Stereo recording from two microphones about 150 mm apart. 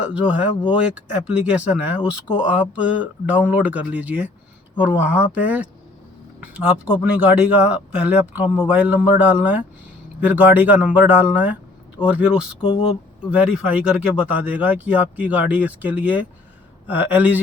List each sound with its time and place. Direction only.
0.1 s speech: 10° right (ahead or behind)
1.5 s speech: 10° right (ahead or behind)
12.6 s speech: 35° left (ahead or behind)
13.3 s speech: 10° right (ahead or behind)